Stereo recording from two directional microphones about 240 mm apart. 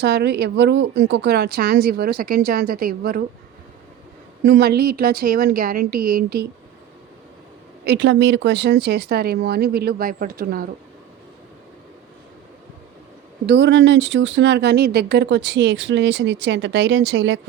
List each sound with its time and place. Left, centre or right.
0.0 s speech: right
4.4 s speech: right
7.9 s speech: right
13.4 s speech: right